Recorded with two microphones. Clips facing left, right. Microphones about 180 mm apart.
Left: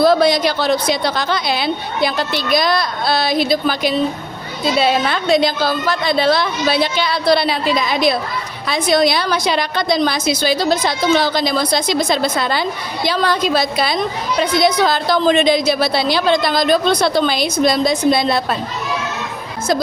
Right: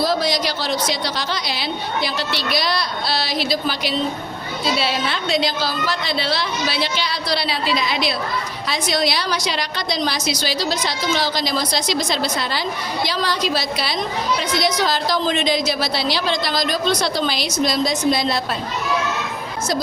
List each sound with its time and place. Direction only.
0.0 s a woman's voice: 55° left (ahead or behind)